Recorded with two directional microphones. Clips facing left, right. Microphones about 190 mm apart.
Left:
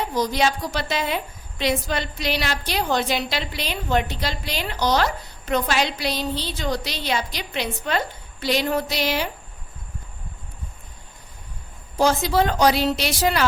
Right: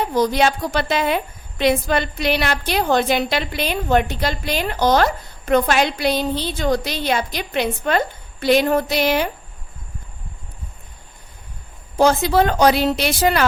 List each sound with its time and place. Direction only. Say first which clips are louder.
0.1 s a woman's voice: right 4 dB; 55° right (ahead or behind)
11.9 s a woman's voice: right 4 dB; 55° right (ahead or behind)